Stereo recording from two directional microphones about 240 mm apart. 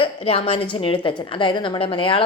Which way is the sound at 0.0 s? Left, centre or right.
Left.